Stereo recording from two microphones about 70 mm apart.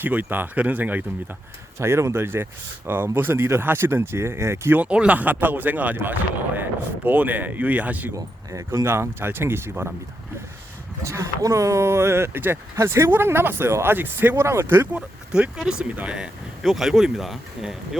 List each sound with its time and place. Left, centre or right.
0.0 s speech: right
1.8 s speech: right
4.8 s speech: centre
8.1 s speech: right
11.0 s speech: right
14.4 s speech: right
14.9 s speech: centre
16.6 s speech: centre